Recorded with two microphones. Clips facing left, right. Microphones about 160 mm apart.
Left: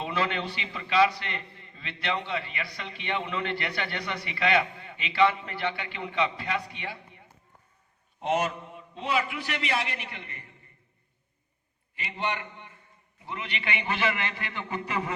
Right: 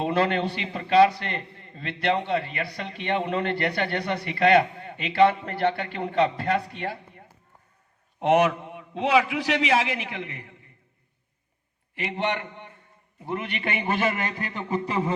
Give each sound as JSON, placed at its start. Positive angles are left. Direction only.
{"t": 0.0, "sound": "a man's voice", "side_deg": -45}
{"t": 8.2, "sound": "a man's voice", "side_deg": -65}
{"t": 11.9, "sound": "a man's voice", "side_deg": -65}